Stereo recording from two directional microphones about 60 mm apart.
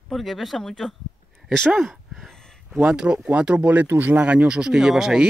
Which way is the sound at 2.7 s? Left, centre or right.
Centre.